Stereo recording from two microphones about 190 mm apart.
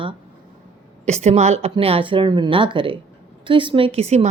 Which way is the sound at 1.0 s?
35° right (ahead or behind).